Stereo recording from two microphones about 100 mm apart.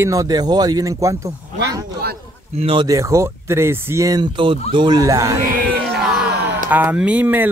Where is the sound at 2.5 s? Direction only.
70° right (ahead or behind).